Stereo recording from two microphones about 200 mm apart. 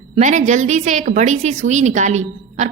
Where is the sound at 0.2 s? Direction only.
35° right (ahead or behind).